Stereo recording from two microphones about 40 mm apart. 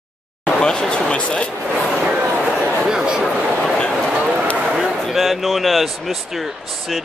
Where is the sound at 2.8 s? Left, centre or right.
Centre.